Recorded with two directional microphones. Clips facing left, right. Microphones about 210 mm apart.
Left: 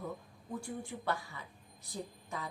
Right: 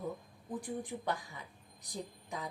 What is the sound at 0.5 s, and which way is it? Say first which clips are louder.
A woman's voice: right 2 dB; 15° right (ahead or behind).